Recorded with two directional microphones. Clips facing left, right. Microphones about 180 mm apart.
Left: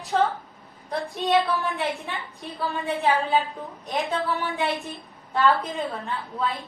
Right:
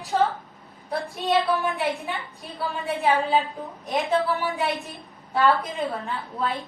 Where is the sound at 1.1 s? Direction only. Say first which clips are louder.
Even; centre (ahead or behind).